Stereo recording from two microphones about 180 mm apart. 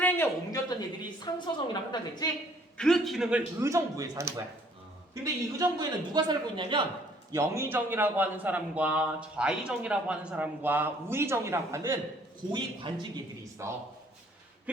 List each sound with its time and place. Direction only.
0.0 s speech: 15° left (ahead or behind)
1.2 s a woman's voice: 25° left (ahead or behind)
2.7 s a man's voice: 5° left (ahead or behind)
3.6 s a man's voice: 15° right (ahead or behind)
7.3 s a man's voice: 15° right (ahead or behind)
12.5 s a man's voice: 25° right (ahead or behind)
13.6 s a man's voice: 15° right (ahead or behind)